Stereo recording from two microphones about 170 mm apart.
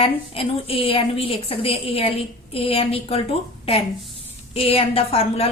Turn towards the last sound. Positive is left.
turn(degrees=35)  # may be behind; listen again after turning